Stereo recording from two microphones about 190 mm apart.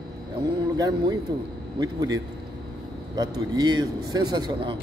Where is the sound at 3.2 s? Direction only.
20° right (ahead or behind).